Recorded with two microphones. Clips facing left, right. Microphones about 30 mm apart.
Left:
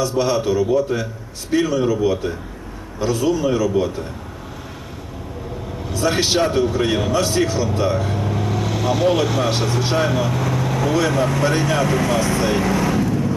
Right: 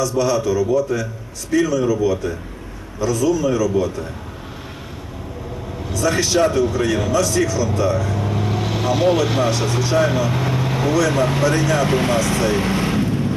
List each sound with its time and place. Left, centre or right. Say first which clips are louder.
0.0 s a man's voice: even; left
5.9 s a man's voice: right 1 dB; left
6.6 s speech: even; left
8.2 s vehicle: even; centre
9.2 s speech: right 1 dB; centre
10.2 s speech: even; right
11.1 s speech: right 1 dB; right
11.8 s vehicle: right 1 dB; right